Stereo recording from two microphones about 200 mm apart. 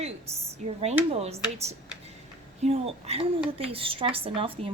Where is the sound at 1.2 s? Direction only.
30° right (ahead or behind).